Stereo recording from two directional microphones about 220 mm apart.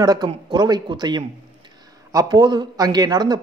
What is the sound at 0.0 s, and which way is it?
Speech, 15° right (ahead or behind).